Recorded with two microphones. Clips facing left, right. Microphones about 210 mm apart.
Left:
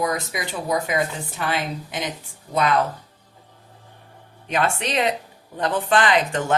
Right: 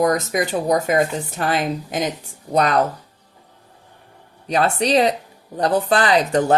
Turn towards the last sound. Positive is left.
turn(degrees=-35)  # may be behind; listen again after turning